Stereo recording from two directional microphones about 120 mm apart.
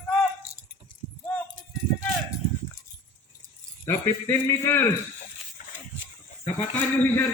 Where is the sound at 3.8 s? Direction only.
20° left (ahead or behind).